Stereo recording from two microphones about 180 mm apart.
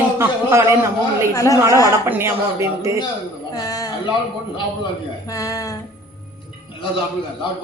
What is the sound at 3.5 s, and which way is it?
Speech, 20° left (ahead or behind).